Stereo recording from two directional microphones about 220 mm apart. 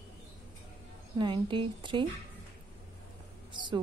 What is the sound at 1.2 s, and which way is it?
Speech, 20° right (ahead or behind).